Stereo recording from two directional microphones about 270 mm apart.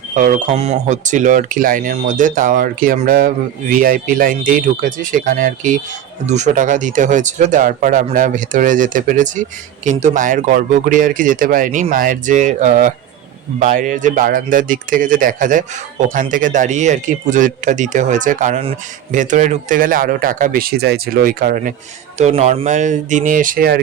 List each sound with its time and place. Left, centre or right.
0.1 s speech: right